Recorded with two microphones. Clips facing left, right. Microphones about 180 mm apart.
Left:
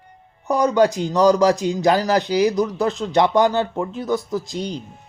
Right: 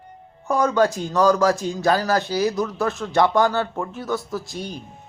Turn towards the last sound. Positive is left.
turn(degrees=15)  # may be behind; listen again after turning